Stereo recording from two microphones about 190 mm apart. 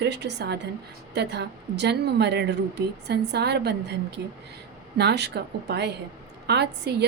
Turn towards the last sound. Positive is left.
turn(degrees=-65)  # may be behind; listen again after turning